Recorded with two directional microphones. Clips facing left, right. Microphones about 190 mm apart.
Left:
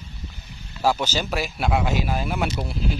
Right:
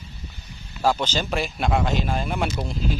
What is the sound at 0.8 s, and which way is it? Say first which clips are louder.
Speech: even; 10° left (ahead or behind).